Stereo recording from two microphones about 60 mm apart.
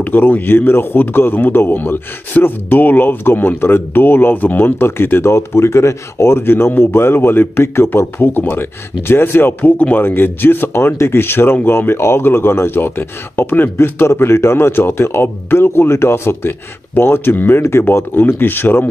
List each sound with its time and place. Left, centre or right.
0.0 s a man's voice: left
17.6 s a man's voice: left